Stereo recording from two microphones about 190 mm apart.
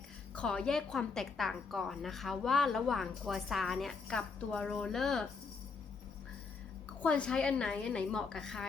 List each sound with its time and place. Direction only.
0.3 s a woman's voice: 5° left (ahead or behind)
7.0 s a woman's voice: 5° left (ahead or behind)